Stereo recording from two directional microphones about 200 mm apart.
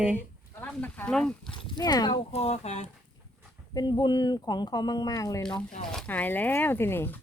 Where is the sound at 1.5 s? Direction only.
25° left (ahead or behind).